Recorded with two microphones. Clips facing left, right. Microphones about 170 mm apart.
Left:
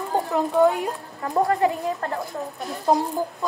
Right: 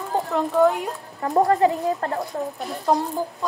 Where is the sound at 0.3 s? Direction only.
Centre (ahead or behind).